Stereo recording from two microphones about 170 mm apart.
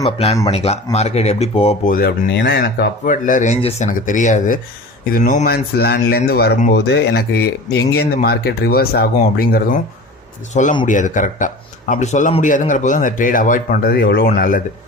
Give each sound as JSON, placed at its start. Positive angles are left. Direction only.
{"t": 0.0, "sound": "speech", "side_deg": 35}
{"t": 1.9, "sound": "speech", "side_deg": 60}
{"t": 3.2, "sound": "speech", "side_deg": 45}
{"t": 3.8, "sound": "speech", "side_deg": 50}
{"t": 10.5, "sound": "speech", "side_deg": 45}